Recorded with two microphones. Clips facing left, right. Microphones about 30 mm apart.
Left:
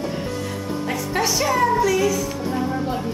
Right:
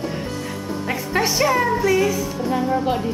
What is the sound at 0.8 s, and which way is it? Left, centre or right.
Speech, centre.